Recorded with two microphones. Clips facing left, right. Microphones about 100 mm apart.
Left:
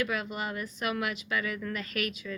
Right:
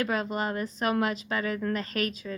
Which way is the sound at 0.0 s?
35° right (ahead or behind).